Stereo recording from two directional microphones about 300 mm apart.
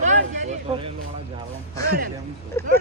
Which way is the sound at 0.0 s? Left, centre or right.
Right.